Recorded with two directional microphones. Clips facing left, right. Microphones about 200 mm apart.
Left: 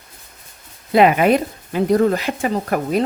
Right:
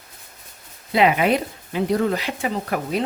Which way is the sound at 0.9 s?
50° left (ahead or behind).